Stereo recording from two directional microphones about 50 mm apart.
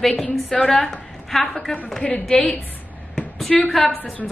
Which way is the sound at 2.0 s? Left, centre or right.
Centre.